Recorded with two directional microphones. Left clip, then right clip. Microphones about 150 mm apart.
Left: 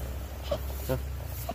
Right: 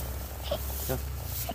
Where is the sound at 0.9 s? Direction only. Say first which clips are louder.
Left 2 dB; 55° left (ahead or behind).